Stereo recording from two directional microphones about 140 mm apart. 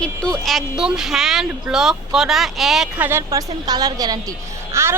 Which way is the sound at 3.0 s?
15° right (ahead or behind).